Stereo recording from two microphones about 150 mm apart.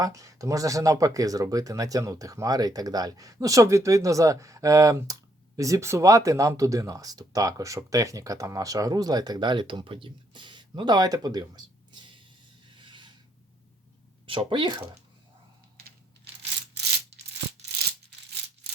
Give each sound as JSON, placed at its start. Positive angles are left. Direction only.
{"t": 0.0, "sound": "speech", "side_deg": -20}
{"t": 12.9, "sound": "rub", "side_deg": -30}
{"t": 14.3, "sound": "speech", "side_deg": -35}